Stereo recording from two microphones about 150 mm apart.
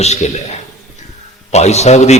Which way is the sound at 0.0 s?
50° left (ahead or behind).